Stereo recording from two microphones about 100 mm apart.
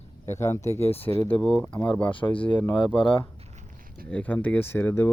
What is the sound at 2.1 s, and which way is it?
Speech, 60° left (ahead or behind).